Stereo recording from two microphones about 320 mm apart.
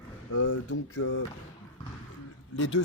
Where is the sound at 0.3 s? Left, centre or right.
Left.